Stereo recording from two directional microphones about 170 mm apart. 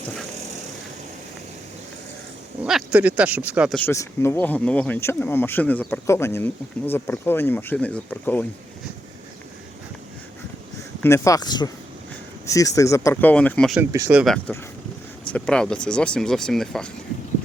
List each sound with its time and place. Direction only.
2.6 s speech: 5° right (ahead or behind)
3.7 s speech: 10° left (ahead or behind)
11.0 s speech: 15° left (ahead or behind)
13.9 s speech: 10° right (ahead or behind)
14.3 s speech: 10° left (ahead or behind)